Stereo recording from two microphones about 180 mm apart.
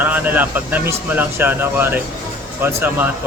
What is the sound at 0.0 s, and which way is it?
Speech, 10° right (ahead or behind).